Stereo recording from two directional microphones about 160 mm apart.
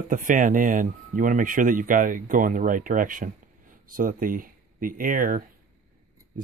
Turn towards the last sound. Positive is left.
turn(degrees=-60)  # may be behind; listen again after turning